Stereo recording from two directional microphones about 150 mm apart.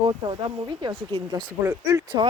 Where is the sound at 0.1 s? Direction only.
35° right (ahead or behind).